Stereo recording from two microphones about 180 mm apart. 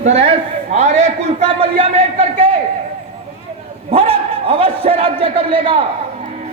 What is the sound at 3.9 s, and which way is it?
A man's voice, 30° right (ahead or behind).